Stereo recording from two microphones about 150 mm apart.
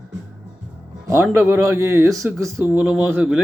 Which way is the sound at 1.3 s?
15° right (ahead or behind).